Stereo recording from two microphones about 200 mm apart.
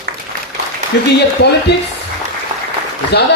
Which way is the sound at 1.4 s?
60° left (ahead or behind).